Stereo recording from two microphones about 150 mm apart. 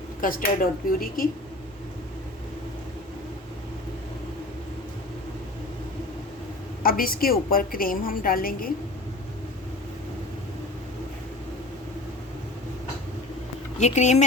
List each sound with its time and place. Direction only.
0.2 s a woman's voice: 70° left (ahead or behind)
6.8 s a woman's voice: 75° left (ahead or behind)
13.7 s speech: 50° left (ahead or behind)